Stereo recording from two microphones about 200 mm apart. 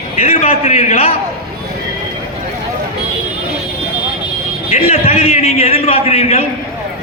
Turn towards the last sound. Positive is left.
turn(degrees=30)  # may be behind; listen again after turning